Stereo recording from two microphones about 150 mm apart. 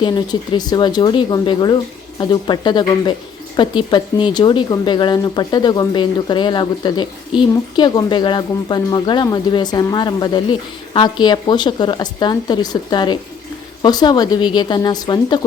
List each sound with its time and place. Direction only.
0.0 s speech: 30° left (ahead or behind)